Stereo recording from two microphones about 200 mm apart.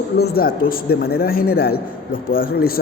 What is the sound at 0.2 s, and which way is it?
A man's voice, 50° left (ahead or behind).